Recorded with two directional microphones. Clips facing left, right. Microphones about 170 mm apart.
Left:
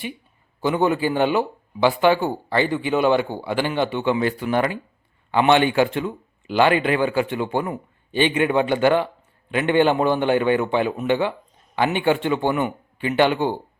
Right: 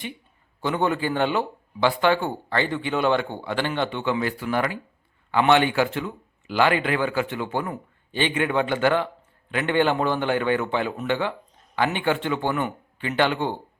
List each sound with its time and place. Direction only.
0.6 s speech: 10° left (ahead or behind)